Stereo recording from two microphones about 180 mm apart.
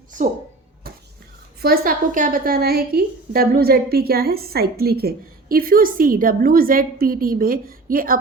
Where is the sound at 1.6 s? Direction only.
55° right (ahead or behind).